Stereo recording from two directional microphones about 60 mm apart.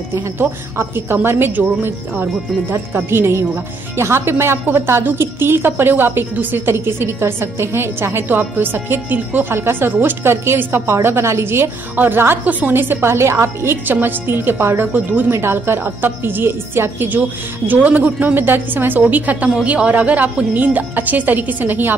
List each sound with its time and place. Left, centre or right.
0.4 s a woman's voice: right
3.1 s a woman's voice: right
12.0 s a woman's voice: right
15.3 s a woman's voice: right
17.6 s a woman's voice: right